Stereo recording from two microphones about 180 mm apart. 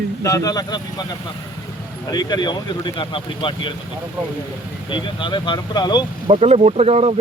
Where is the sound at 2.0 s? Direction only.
25° left (ahead or behind).